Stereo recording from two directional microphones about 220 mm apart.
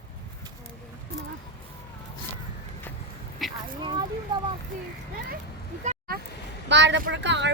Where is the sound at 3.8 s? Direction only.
20° right (ahead or behind).